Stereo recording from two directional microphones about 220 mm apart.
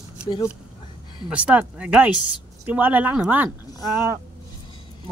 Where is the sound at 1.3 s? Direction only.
5° right (ahead or behind).